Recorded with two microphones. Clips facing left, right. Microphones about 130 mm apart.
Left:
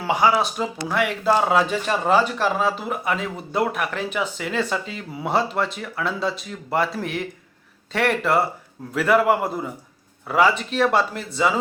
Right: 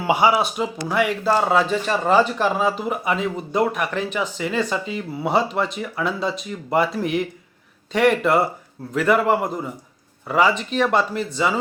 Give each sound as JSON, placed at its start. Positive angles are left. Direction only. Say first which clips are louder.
{"t": 0.0, "sound": "speech", "louder": "right 1 dB", "side_deg": -10}
{"t": 2.6, "sound": "speech", "louder": "right 2 dB", "side_deg": -5}